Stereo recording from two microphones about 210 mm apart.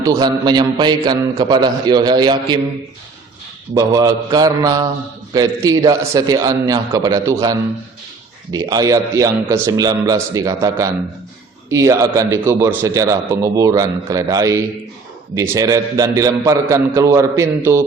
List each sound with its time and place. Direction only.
0.0 s a man's voice: 15° right (ahead or behind)
3.8 s a man's voice: 15° right (ahead or behind)